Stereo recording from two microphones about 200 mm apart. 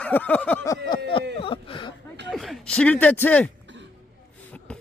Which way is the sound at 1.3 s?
25° left (ahead or behind).